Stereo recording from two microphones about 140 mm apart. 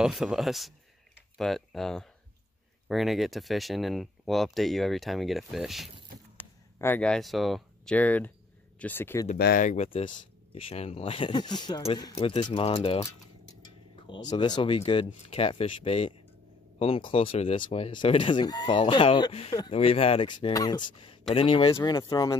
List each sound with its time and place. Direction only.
0.0 s speech: 5° right (ahead or behind)
6.3 s speech: 15° left (ahead or behind)
9.3 s speech: 65° left (ahead or behind)
9.8 s speech: 40° left (ahead or behind)
21.7 s speech: 30° left (ahead or behind)